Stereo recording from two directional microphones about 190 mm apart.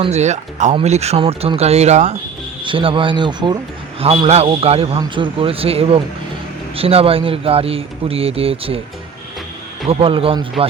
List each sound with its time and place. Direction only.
0.0 s a man's voice: 35° right (ahead or behind)
9.9 s a man's voice: 30° right (ahead or behind)